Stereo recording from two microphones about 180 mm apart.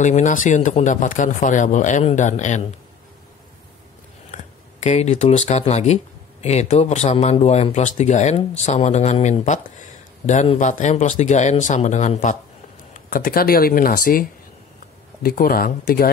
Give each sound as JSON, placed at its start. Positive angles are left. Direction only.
{"t": 0.0, "sound": "speech", "side_deg": 45}
{"t": 4.3, "sound": "speech", "side_deg": 40}
{"t": 12.9, "sound": "speech", "side_deg": 55}
{"t": 15.2, "sound": "speech", "side_deg": 55}